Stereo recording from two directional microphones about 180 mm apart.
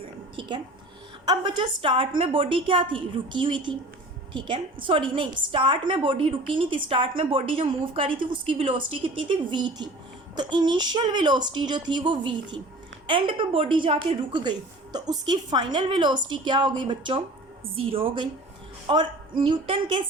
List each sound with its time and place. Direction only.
0.3 s a woman's voice: 25° right (ahead or behind)